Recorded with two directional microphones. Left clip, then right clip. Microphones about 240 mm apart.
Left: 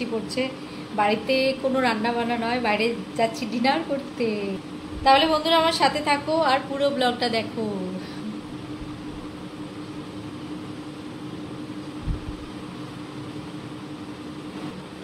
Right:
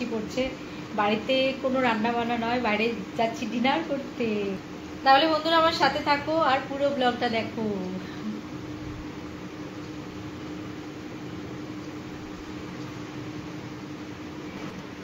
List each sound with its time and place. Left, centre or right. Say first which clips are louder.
0.4 s a woman's voice: left 2 dB; centre
5.0 s a woman's voice: left 2 dB; centre